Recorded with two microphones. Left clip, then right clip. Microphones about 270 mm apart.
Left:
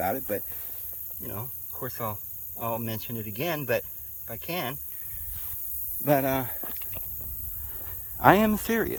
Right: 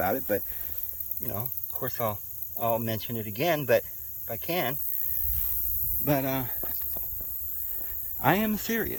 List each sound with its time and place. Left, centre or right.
0.0 s speech: centre
6.1 s speech: centre
7.9 s speech: centre